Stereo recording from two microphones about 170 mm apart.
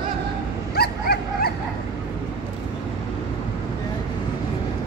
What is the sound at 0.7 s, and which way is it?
Dog, 65° left (ahead or behind).